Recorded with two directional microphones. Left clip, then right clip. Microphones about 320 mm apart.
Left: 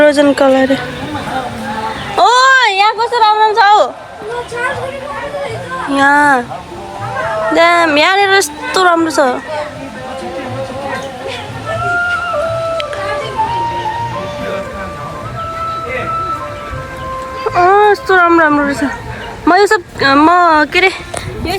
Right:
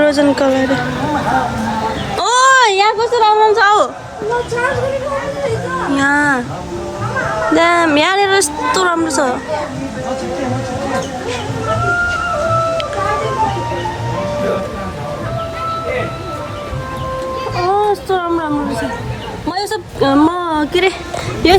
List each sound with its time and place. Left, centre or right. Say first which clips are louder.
0.0 s a woman's voice: left 4 dB; centre
2.1 s a sound: left 3 dB; centre
5.9 s a woman's voice: left 5 dB; centre
7.5 s a woman's voice: left 3 dB; centre
17.7 s a woman's voice: left 5 dB; centre
21.4 s speech: right 10 dB; right